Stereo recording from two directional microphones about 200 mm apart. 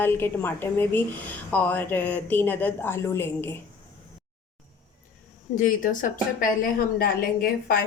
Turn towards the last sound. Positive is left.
turn(degrees=50)  # may be behind; listen again after turning